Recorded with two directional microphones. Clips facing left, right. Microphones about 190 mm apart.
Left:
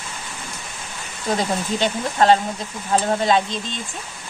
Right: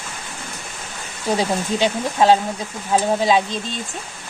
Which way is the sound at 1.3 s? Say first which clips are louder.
Right 2 dB; 10° right (ahead or behind).